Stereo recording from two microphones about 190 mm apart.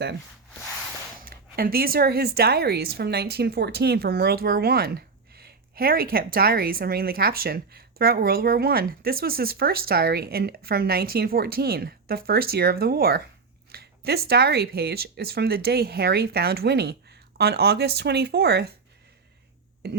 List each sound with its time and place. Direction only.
1.2 s speech: 50° right (ahead or behind)
19.8 s speech: 55° right (ahead or behind)